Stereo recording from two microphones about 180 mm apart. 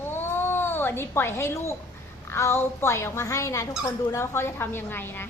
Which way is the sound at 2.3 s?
15° left (ahead or behind).